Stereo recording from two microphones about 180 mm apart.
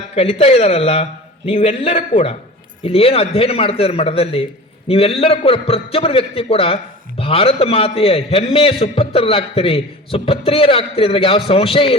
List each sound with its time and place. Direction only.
0.2 s a man's voice: 35° left (ahead or behind)